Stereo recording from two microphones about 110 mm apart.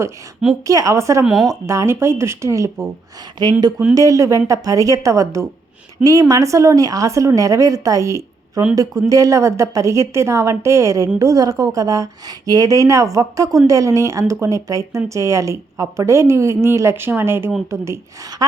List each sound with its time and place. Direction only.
0.7 s a woman's voice: 30° right (ahead or behind)
1.2 s speech: centre (ahead or behind)
1.5 s a woman's voice: 30° right (ahead or behind)
3.4 s a woman's voice: 40° right (ahead or behind)